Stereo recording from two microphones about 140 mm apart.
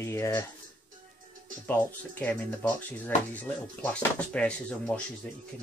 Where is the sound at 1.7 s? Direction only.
10° left (ahead or behind).